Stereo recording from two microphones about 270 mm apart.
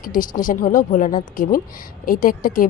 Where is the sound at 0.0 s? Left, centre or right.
Left.